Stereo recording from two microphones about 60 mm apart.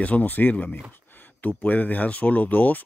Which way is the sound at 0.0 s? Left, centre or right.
Left.